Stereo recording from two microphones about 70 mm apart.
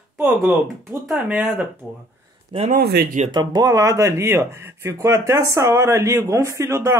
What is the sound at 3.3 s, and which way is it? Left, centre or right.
Speech, right.